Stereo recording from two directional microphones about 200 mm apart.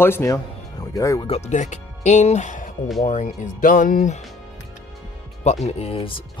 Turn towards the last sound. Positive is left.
turn(degrees=25)  # may be behind; listen again after turning